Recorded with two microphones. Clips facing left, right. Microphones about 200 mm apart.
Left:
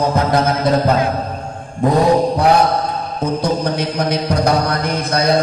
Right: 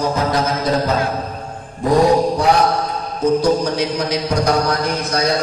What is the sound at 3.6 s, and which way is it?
Mantra, 55° left (ahead or behind).